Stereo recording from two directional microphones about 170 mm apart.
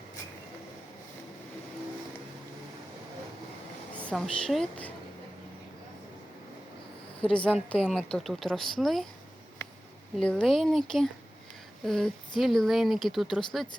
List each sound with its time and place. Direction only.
4.0 s speech: 5° left (ahead or behind)
7.2 s a woman's voice: 5° left (ahead or behind)
10.2 s speech: 5° left (ahead or behind)